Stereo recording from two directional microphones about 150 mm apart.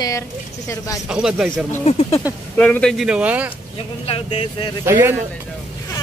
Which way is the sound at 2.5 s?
10° left (ahead or behind).